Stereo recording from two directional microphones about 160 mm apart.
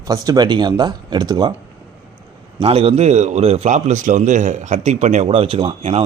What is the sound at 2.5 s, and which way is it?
A man's voice, 35° right (ahead or behind).